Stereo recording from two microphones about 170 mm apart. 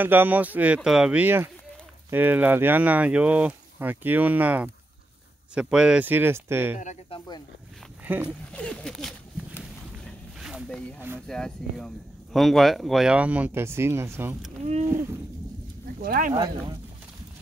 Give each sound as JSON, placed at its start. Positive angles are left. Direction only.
{"t": 0.0, "sound": "speech", "side_deg": -10}
{"t": 7.1, "sound": "speech", "side_deg": 25}
{"t": 8.0, "sound": "speech", "side_deg": -10}
{"t": 8.5, "sound": "speech", "side_deg": 5}
{"t": 10.4, "sound": "a sound", "side_deg": -5}
{"t": 11.2, "sound": "speech", "side_deg": 5}
{"t": 14.6, "sound": "speech", "side_deg": -40}
{"t": 16.0, "sound": "speech", "side_deg": -55}
{"t": 16.3, "sound": "speech", "side_deg": -20}